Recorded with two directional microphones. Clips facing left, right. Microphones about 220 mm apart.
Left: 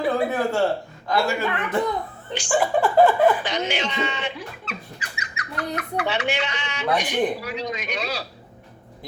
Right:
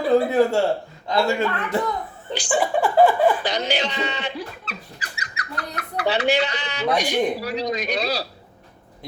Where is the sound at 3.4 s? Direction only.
35° right (ahead or behind).